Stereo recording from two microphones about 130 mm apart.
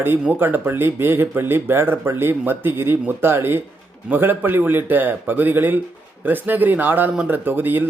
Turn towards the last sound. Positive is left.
turn(degrees=-15)  # may be behind; listen again after turning